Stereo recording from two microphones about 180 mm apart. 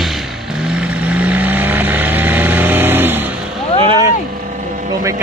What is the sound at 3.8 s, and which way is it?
Vehicle, 25° right (ahead or behind).